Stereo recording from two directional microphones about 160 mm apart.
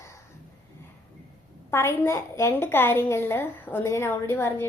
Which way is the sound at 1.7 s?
15° left (ahead or behind).